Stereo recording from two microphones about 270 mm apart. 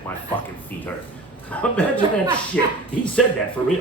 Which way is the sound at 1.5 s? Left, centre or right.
Centre.